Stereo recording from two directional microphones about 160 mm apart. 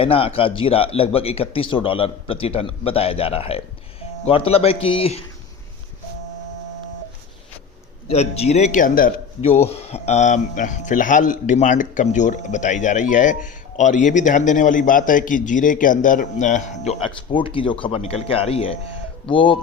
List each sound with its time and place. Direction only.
0.0 s speech: 35° left (ahead or behind)
8.0 s speech: 40° left (ahead or behind); by 9.2 s 60° left (ahead or behind)
9.6 s speech: 40° left (ahead or behind)